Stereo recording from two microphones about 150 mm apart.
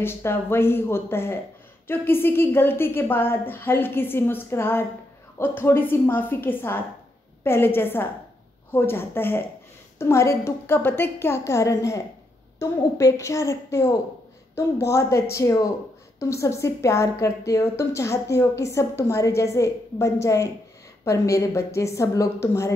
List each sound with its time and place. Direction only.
0.0 s a woman's voice: 15° left (ahead or behind)